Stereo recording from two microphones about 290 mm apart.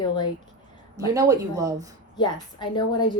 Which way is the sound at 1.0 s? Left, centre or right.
Centre.